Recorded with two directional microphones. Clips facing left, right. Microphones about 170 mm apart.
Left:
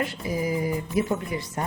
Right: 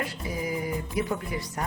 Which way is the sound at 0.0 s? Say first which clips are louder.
Left 4 dB; 25° left (ahead or behind).